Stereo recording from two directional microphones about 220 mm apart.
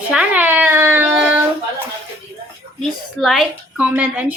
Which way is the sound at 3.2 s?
Centre (ahead or behind).